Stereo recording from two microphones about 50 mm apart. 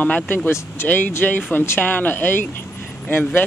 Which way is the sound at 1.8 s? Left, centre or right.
Left.